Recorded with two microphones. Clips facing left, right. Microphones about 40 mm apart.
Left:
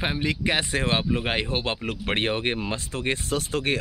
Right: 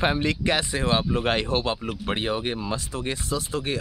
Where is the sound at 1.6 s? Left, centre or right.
Left.